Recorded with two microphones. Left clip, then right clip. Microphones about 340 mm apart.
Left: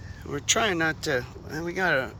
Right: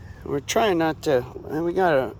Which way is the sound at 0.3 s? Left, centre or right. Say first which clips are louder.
Right 3 dB; centre.